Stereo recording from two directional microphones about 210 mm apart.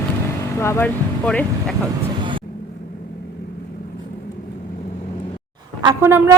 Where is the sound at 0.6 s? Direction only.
10° left (ahead or behind).